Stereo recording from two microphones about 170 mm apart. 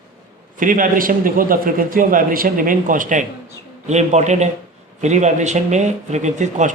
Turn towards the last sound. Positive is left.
turn(degrees=-45)  # may be behind; listen again after turning